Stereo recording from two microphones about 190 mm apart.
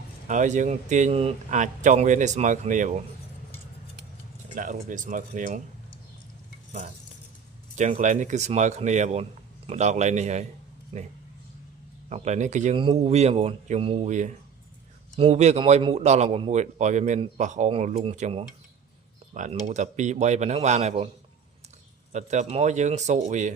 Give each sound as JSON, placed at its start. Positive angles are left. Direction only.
{"t": 0.3, "sound": "speech", "side_deg": -40}
{"t": 4.5, "sound": "speech", "side_deg": -45}
{"t": 7.8, "sound": "speech", "side_deg": -40}
{"t": 12.0, "sound": "speech", "side_deg": -35}
{"t": 22.1, "sound": "speech", "side_deg": -40}